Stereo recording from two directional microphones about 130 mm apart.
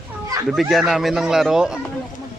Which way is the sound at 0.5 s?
Centre (ahead or behind).